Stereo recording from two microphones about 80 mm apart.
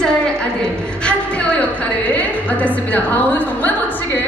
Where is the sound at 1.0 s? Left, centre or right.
Centre.